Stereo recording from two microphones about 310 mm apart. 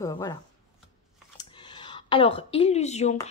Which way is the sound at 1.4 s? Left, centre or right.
Centre.